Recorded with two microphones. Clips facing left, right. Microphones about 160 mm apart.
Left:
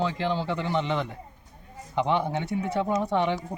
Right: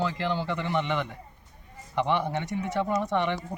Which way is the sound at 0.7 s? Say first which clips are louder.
Left 1 dB; 30° left (ahead or behind).